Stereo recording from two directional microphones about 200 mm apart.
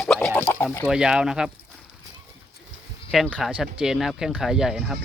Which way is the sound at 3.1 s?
Centre (ahead or behind).